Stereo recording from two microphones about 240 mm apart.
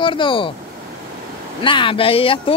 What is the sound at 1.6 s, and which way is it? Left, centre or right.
Speech, left.